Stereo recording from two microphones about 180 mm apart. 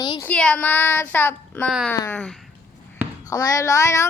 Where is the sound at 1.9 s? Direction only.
10° left (ahead or behind).